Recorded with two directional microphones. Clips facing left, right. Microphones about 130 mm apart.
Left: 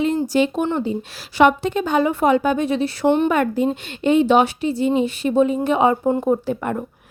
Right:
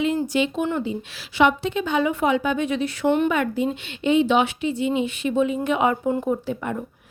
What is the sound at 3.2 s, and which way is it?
A woman's voice, 45° left (ahead or behind).